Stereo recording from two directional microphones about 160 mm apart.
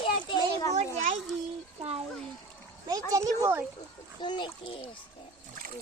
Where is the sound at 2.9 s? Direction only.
20° right (ahead or behind).